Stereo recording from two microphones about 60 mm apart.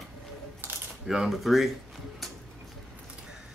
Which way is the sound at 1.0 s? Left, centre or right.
Centre.